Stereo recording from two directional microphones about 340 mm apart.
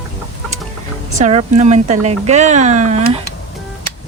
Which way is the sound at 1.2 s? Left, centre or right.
Centre.